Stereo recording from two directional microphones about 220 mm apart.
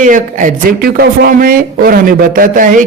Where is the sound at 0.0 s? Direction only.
35° right (ahead or behind).